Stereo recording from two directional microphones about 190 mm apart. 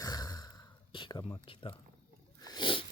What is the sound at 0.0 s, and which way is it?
Sigh, 20° left (ahead or behind).